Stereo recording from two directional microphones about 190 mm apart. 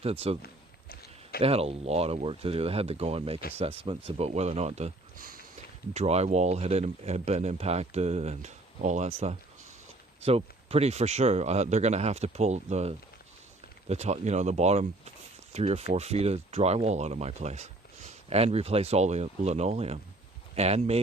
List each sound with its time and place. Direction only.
0.0 s speech: 30° right (ahead or behind)
0.4 s a sound: 55° left (ahead or behind)
1.4 s speech: 30° right (ahead or behind)
5.9 s speech: 35° right (ahead or behind)